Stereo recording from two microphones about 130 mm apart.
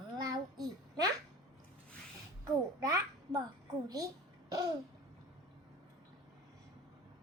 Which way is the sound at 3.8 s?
30° right (ahead or behind).